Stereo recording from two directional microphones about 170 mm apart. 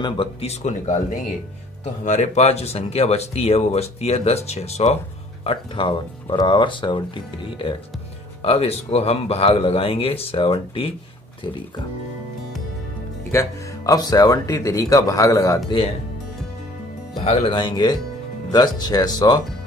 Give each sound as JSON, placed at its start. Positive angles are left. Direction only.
{"t": 0.0, "sound": "speech", "side_deg": 35}
{"t": 2.0, "sound": "speech", "side_deg": 45}
{"t": 8.4, "sound": "speech", "side_deg": 35}
{"t": 13.3, "sound": "speech", "side_deg": 20}
{"t": 17.2, "sound": "speech", "side_deg": 35}